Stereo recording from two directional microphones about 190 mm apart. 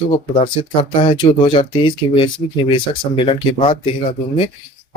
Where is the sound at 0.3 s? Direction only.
25° left (ahead or behind).